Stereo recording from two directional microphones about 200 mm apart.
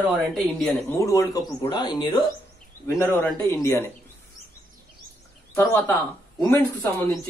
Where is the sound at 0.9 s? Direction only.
15° left (ahead or behind).